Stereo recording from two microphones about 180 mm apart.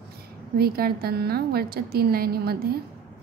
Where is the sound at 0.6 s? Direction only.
60° right (ahead or behind).